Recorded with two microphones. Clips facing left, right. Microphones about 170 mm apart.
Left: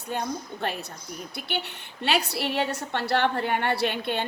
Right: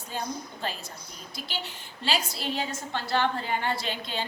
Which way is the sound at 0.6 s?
60° left (ahead or behind).